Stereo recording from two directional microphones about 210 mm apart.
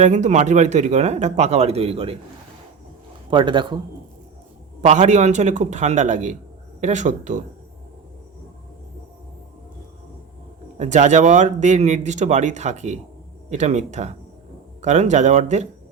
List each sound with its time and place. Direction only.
0.0 s speech: 35° right (ahead or behind)
3.2 s speech: 20° right (ahead or behind)
4.8 s speech: 30° right (ahead or behind)
10.8 s speech: 35° right (ahead or behind)